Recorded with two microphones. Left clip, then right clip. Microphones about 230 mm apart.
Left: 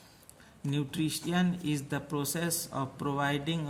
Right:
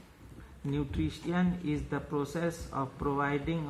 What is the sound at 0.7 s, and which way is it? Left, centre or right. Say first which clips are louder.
Speech: left 1 dB; left.